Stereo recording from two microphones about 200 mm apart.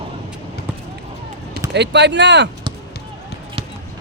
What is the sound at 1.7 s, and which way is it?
Speech, 60° right (ahead or behind).